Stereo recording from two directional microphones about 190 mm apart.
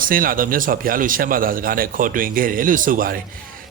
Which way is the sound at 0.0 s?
50° right (ahead or behind).